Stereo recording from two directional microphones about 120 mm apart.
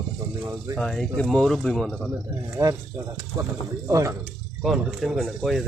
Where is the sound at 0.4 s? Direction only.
25° right (ahead or behind).